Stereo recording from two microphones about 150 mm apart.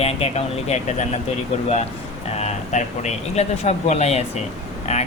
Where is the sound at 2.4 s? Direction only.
50° left (ahead or behind).